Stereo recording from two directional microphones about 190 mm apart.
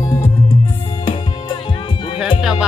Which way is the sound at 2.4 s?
5° right (ahead or behind).